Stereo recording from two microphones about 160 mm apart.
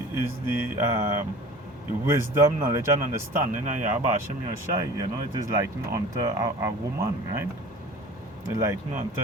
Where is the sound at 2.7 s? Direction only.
20° right (ahead or behind).